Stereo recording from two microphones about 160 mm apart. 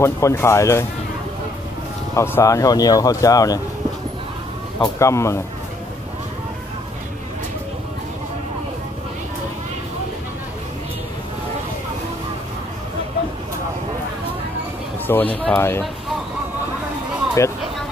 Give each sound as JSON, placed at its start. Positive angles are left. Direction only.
{"t": 0.0, "sound": "speech", "side_deg": 15}
{"t": 2.1, "sound": "speech", "side_deg": 15}
{"t": 4.7, "sound": "speech", "side_deg": 25}
{"t": 15.0, "sound": "speech", "side_deg": 10}